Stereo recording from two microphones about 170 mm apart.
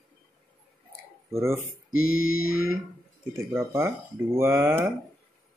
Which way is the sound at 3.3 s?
15° right (ahead or behind).